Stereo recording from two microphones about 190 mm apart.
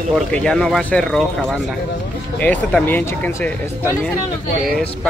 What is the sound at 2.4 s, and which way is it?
Speech, 10° left (ahead or behind).